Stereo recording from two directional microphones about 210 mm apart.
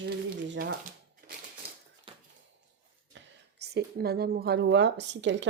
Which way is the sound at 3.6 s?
50° right (ahead or behind).